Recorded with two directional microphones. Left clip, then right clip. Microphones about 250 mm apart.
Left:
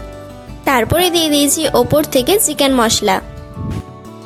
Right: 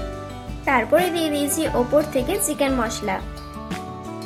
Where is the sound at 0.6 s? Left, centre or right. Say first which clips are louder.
Left 5 dB; left.